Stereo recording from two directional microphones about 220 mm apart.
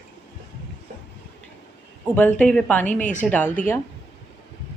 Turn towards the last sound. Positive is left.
turn(degrees=5)  # may be behind; listen again after turning